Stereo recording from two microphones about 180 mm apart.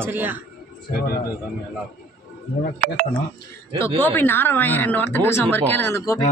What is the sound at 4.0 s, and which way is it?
Speech, 10° left (ahead or behind).